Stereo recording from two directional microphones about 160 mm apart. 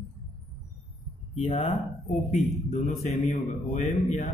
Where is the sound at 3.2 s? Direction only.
45° left (ahead or behind).